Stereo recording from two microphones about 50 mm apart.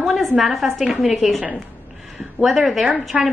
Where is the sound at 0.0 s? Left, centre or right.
Centre.